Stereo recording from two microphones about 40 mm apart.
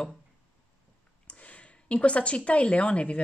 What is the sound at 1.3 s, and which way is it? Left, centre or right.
Speech, left.